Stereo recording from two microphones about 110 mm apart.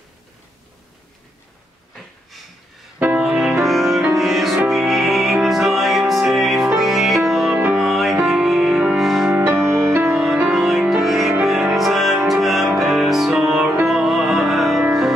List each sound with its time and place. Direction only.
3.0 s music: 10° right (ahead or behind)
9.4 s music: 15° right (ahead or behind)